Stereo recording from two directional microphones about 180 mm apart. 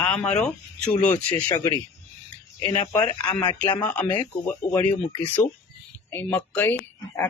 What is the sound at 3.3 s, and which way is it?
Speech, 25° left (ahead or behind).